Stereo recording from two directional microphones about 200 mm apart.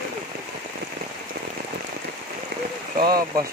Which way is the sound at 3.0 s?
50° right (ahead or behind).